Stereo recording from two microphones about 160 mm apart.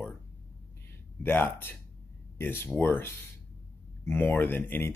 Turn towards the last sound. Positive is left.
turn(degrees=15)  # may be behind; listen again after turning